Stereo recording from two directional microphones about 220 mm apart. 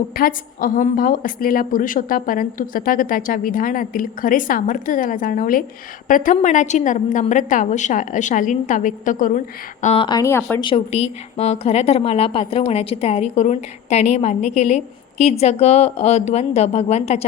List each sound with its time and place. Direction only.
0.1 s a woman's voice: 40° left (ahead or behind)
9.8 s a woman's voice: 25° left (ahead or behind)
10.7 s a woman's voice: 25° left (ahead or behind)